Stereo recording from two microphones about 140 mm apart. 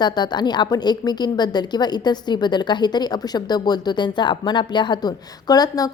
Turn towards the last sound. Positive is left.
turn(degrees=30)  # may be behind; listen again after turning